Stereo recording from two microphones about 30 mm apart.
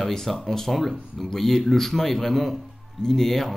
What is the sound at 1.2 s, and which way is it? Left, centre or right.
Speech, centre.